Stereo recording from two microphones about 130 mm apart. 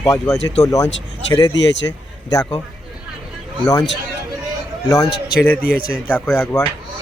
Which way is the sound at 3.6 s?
30° left (ahead or behind).